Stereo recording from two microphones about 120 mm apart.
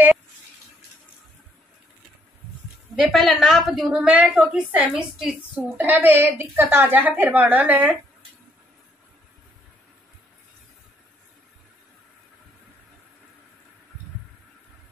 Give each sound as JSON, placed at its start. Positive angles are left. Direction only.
{"t": 3.0, "sound": "a woman's voice", "side_deg": 0}